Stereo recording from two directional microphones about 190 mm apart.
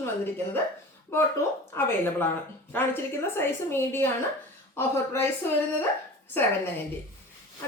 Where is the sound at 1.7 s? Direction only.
10° left (ahead or behind).